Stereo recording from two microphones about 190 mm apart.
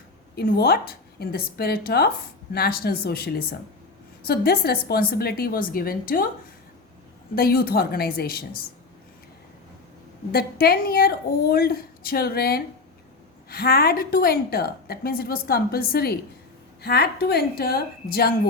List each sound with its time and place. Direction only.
0.3 s a woman's voice: 55° left (ahead or behind)
7.3 s a woman's voice: 50° left (ahead or behind)
10.3 s a woman's voice: 55° left (ahead or behind)